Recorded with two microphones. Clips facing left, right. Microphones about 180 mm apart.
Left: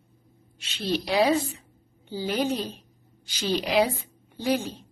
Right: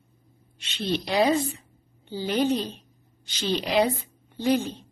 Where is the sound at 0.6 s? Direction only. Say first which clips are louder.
Even; 5° left (ahead or behind).